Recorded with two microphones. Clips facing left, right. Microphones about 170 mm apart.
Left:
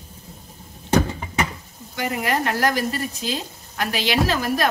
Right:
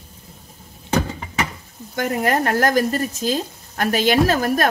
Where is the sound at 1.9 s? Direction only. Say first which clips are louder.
Right 4 dB; 45° right (ahead or behind).